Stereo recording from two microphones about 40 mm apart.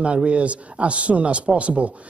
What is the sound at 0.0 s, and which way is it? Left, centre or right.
Speech, right.